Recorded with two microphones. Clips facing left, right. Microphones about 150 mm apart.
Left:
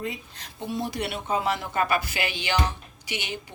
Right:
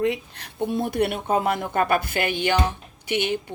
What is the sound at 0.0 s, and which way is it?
Speech, 65° right (ahead or behind).